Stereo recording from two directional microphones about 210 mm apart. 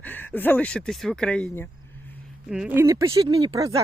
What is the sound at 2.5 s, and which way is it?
Speech, 5° right (ahead or behind).